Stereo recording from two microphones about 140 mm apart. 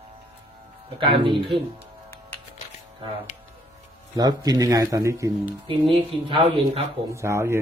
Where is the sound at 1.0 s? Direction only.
35° right (ahead or behind).